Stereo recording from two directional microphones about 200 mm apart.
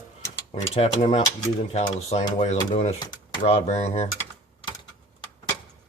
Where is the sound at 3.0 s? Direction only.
20° left (ahead or behind).